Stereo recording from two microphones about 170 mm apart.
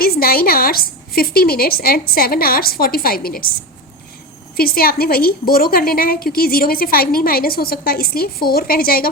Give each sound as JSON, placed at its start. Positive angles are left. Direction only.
{"t": 0.0, "sound": "a woman's voice", "side_deg": 60}
{"t": 4.5, "sound": "a woman's voice", "side_deg": 60}